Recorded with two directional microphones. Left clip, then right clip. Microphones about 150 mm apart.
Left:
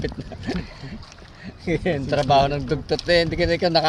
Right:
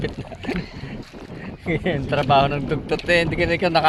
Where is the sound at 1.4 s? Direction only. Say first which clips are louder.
Even; 25° left (ahead or behind).